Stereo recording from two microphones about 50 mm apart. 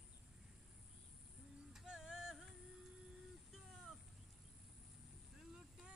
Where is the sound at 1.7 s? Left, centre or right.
Centre.